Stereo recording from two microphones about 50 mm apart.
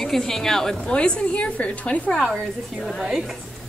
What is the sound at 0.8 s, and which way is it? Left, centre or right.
A woman's voice, left.